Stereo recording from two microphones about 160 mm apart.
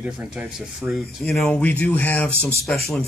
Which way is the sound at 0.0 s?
10° right (ahead or behind).